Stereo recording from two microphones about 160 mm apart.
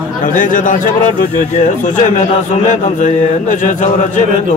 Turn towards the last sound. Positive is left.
turn(degrees=50)  # may be behind; listen again after turning